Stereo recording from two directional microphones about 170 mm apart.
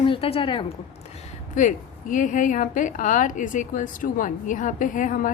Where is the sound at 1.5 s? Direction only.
50° left (ahead or behind).